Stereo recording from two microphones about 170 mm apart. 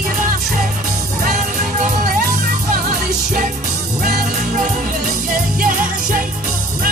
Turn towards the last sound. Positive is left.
turn(degrees=-55)  # may be behind; listen again after turning